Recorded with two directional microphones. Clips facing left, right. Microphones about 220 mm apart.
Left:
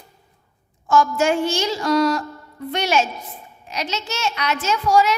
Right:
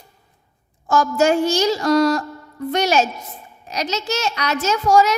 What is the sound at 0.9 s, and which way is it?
A woman's voice, 40° right (ahead or behind).